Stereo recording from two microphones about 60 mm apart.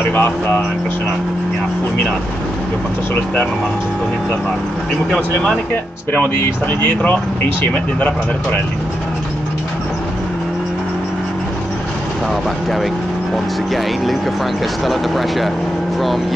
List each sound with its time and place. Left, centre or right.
0.1 s speech: left
5.1 s speech: centre
6.3 s speech: left
14.9 s speech: centre